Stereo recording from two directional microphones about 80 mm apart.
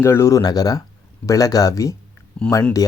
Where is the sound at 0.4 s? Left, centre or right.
Left.